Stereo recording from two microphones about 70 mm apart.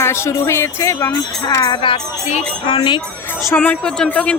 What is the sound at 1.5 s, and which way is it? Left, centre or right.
Speech, left.